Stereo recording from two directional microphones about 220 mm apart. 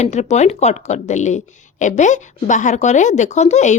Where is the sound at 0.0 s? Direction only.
30° left (ahead or behind).